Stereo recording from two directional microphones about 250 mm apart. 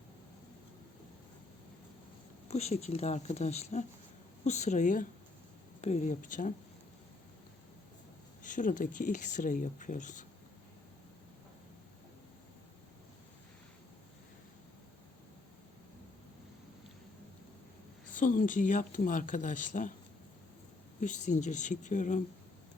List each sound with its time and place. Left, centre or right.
2.5 s speech: left
8.4 s speech: left
18.2 s speech: left
21.0 s speech: left